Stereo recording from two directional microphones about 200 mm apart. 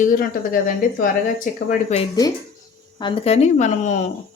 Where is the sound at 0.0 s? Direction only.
45° left (ahead or behind).